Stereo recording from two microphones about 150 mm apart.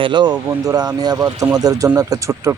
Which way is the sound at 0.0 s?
30° right (ahead or behind).